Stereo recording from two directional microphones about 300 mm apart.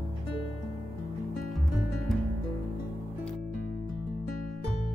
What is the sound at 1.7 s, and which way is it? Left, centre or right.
Music, centre.